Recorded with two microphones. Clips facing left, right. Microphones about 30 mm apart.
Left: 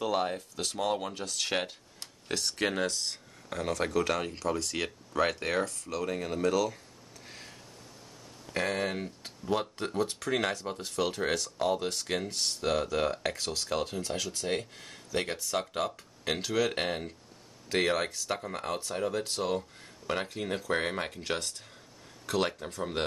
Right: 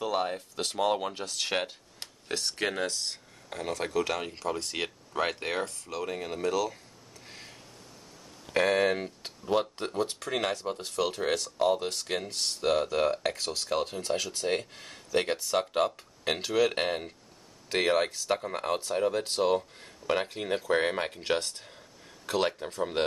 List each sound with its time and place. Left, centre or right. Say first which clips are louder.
0.0 s speech: even; centre
0.7 s speech: right 3 dB; centre
4.6 s speech: even; right; by 6.8 s centre
7.2 s a sound: even; centre
8.6 s speech: right 6 dB; right
9.4 s speech: right 3 dB; centre
14.0 s speech: right 3 dB; right
15.2 s speech: right 4 dB; right
19.2 s speech: right 5 dB; right
22.3 s speech: right 1 dB; right
23.0 s speech: right 4 dB; centre